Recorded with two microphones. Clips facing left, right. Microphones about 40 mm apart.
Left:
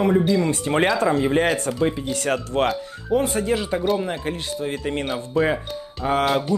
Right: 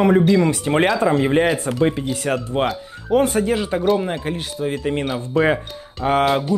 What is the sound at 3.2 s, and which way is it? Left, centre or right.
Speech, centre.